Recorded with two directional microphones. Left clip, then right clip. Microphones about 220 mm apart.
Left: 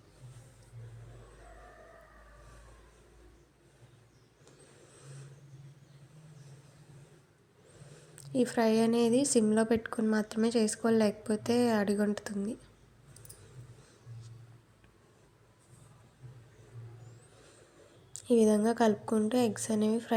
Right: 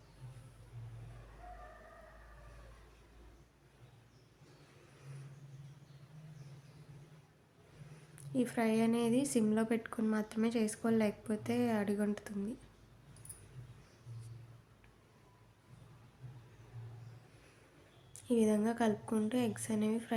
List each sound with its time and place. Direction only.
8.2 s a woman's voice: 20° left (ahead or behind)
18.3 s a woman's voice: 20° left (ahead or behind)